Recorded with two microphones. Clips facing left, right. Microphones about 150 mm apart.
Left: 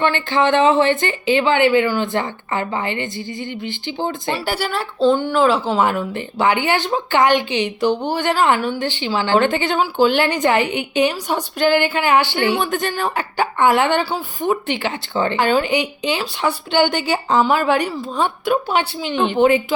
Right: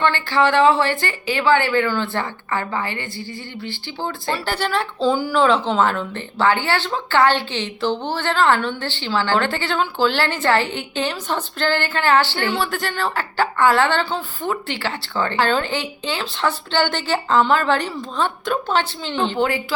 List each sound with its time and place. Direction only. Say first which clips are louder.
0.0 s speech: left 1 dB; 20° left (ahead or behind)